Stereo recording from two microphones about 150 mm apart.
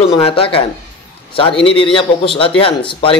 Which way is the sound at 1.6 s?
35° left (ahead or behind).